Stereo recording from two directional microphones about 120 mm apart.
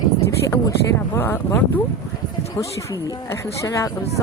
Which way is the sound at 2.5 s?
30° left (ahead or behind).